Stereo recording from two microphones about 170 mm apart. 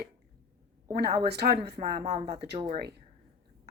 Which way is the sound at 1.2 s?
70° right (ahead or behind).